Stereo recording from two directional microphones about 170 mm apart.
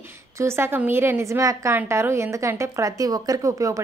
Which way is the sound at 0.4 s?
15° right (ahead or behind).